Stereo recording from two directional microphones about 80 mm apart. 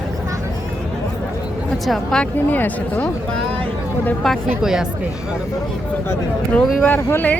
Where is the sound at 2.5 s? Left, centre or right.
Left.